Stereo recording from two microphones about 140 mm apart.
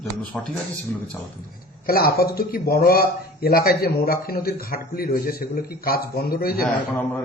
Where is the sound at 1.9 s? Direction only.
90° left.